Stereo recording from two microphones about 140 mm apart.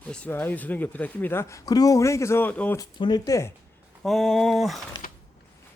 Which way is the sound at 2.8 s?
30° left (ahead or behind).